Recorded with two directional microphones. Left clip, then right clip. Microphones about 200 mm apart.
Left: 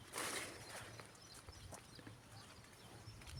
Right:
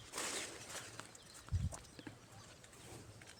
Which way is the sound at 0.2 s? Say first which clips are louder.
Right 1 dB; 15° right (ahead or behind).